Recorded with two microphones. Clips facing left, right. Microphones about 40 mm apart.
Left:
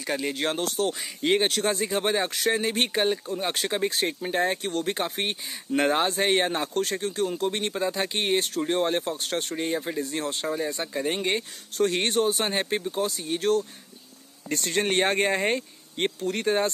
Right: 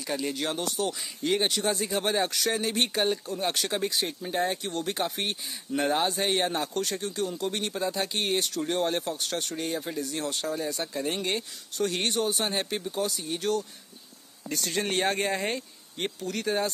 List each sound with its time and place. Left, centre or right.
0.0 s speech: left
0.3 s speech: left
3.9 s speech: left
9.7 s speech: left
10.8 s speech: centre
11.7 s speech: left